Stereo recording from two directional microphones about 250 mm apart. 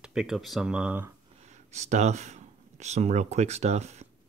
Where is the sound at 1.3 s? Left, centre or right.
Right.